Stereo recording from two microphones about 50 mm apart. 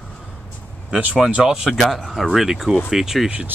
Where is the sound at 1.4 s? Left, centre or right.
Centre.